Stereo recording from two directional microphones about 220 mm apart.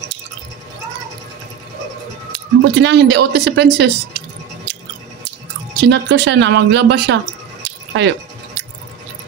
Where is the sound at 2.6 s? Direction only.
50° right (ahead or behind).